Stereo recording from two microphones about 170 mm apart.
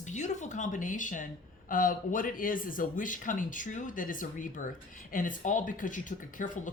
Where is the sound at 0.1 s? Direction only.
45° left (ahead or behind).